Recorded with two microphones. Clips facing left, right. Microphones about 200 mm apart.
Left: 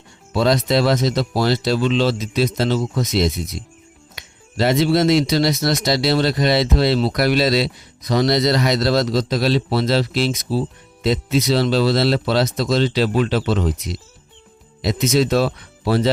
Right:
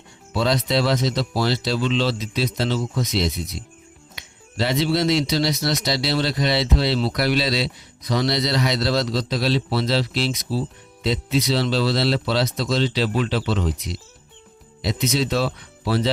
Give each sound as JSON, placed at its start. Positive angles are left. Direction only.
{"t": 0.3, "sound": "speech", "side_deg": 45}